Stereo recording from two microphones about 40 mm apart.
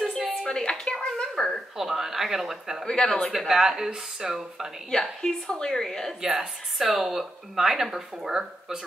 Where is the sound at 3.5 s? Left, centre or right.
Centre.